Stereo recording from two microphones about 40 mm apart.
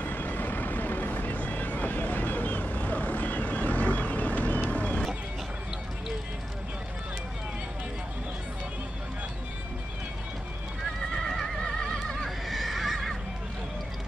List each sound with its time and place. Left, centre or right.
0.0 s vehicle: left
1.3 s vehicle: left
11.1 s neigh: centre
11.6 s neigh: centre
12.4 s neigh: centre